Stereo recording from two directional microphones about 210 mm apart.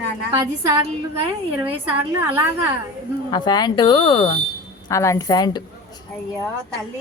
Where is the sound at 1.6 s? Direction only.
10° right (ahead or behind).